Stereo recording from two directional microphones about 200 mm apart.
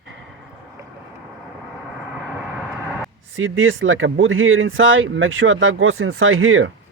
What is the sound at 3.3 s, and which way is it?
Speech, 80° right.